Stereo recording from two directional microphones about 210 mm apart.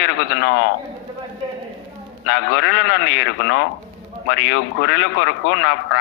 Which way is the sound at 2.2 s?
55° left (ahead or behind).